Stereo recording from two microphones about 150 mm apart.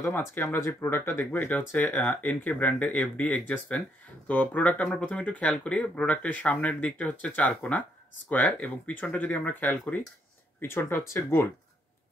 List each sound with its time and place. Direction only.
0.0 s speech: 15° left (ahead or behind)